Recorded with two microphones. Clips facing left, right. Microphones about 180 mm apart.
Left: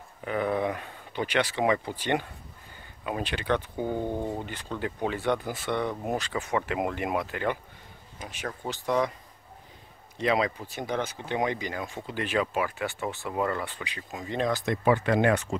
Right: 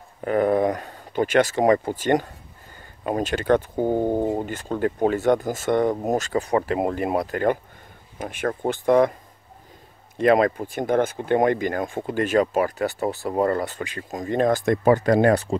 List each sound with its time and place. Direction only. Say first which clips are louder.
0.2 s speech: right 8 dB; 45° right (ahead or behind)
8.2 s speech: right 11 dB; 55° right (ahead or behind)
10.1 s speech: right 8 dB; 50° right (ahead or behind); by 15.5 s 35° right (ahead or behind)